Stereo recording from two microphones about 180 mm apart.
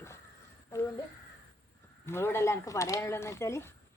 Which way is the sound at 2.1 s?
15° left (ahead or behind).